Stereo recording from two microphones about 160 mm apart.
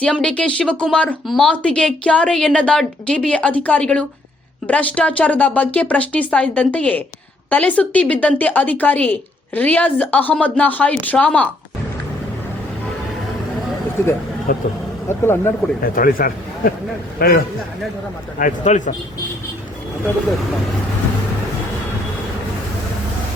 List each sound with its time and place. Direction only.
0.0 s speech: 5° left (ahead or behind)
14.5 s speech: 60° left (ahead or behind)
15.2 s speech: 15° left (ahead or behind)
15.8 s a man's voice: 65° left (ahead or behind)
18.3 s speech: 50° left (ahead or behind)